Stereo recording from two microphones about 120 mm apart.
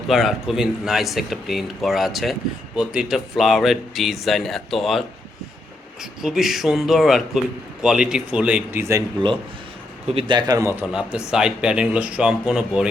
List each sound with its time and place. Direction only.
0.1 s speech: centre (ahead or behind); by 9.0 s 20° right (ahead or behind)
10.1 s a man's voice: 45° right (ahead or behind); by 10.7 s 30° right (ahead or behind)
10.7 s speech: 10° right (ahead or behind)